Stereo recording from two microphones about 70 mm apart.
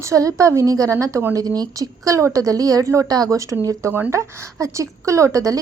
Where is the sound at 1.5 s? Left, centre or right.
Right.